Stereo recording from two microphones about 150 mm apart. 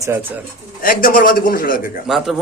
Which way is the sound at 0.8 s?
70° left (ahead or behind).